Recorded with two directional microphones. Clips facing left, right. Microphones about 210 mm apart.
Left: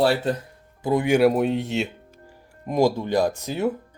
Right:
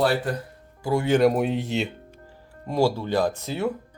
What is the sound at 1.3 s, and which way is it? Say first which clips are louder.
Speech: left 2 dB; centre (ahead or behind).